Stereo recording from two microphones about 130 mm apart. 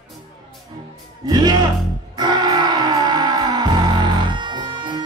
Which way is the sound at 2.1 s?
35° right (ahead or behind).